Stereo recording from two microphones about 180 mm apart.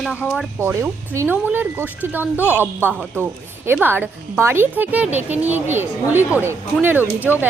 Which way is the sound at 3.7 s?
10° right (ahead or behind).